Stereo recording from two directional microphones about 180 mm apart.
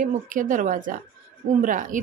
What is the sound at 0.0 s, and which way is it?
Speech, 45° right (ahead or behind).